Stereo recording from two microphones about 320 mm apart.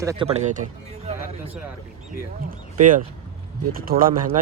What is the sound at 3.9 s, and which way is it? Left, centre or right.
Speech, right.